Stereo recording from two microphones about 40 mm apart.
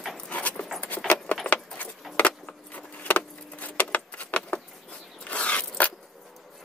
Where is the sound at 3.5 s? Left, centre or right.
Left.